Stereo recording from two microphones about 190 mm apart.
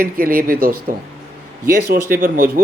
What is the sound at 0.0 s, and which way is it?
Speech, 50° right (ahead or behind).